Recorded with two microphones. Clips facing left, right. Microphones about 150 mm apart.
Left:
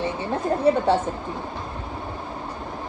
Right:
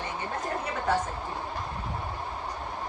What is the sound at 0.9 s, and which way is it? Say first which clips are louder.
Speech: left 6 dB; 30° left (ahead or behind).